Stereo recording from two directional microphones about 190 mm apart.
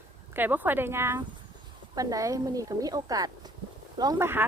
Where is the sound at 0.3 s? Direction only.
10° right (ahead or behind).